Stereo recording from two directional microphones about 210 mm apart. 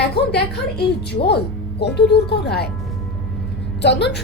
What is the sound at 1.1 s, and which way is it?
A woman's voice, 50° left (ahead or behind).